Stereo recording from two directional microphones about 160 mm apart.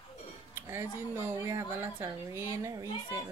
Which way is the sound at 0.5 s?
15° right (ahead or behind).